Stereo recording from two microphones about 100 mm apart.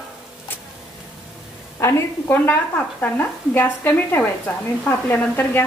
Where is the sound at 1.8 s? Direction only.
20° left (ahead or behind).